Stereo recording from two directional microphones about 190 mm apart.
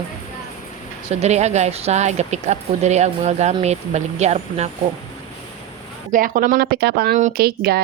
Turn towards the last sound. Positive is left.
turn(degrees=-55)  # may be behind; listen again after turning